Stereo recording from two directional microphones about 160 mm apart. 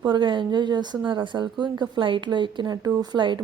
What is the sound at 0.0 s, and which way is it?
Speech, 30° right (ahead or behind).